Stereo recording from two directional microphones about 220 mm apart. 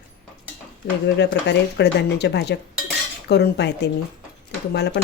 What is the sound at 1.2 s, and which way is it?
Speech, 50° left (ahead or behind).